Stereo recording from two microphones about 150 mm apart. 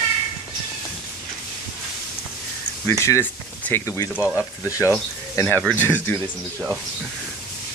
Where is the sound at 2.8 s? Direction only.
20° left (ahead or behind).